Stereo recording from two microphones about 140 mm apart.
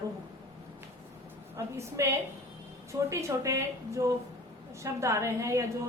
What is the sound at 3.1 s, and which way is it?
A woman's voice, 20° right (ahead or behind).